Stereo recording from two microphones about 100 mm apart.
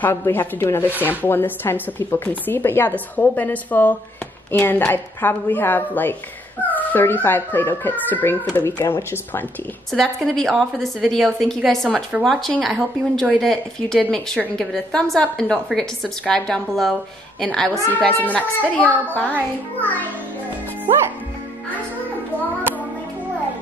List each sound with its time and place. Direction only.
0.1 s a woman's voice: 25° left (ahead or behind)
9.9 s a woman's voice: 5° left (ahead or behind)